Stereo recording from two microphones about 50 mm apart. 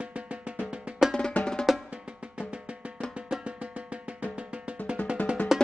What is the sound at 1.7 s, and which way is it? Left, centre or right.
Music, centre.